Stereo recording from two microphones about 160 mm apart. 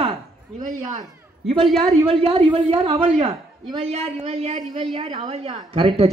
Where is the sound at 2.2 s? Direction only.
35° right (ahead or behind).